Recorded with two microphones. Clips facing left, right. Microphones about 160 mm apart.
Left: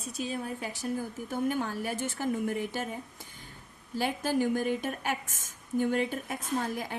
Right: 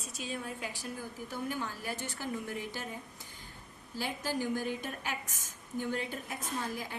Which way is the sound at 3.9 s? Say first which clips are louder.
Left 7 dB; 55° left (ahead or behind).